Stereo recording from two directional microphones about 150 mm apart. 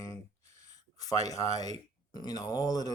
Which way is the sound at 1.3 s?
20° left (ahead or behind).